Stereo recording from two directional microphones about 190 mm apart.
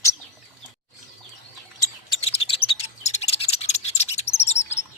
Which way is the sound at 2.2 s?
30° left (ahead or behind).